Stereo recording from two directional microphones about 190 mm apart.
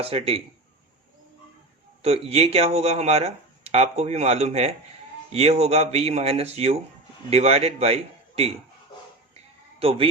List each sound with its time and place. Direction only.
0.0 s speech: 30° right (ahead or behind)
2.0 s speech: 30° right (ahead or behind)